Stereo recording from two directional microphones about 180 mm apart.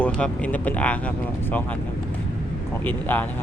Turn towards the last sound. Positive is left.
turn(degrees=10)  # may be behind; listen again after turning